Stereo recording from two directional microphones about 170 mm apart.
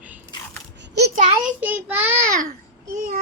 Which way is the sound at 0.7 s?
85° right.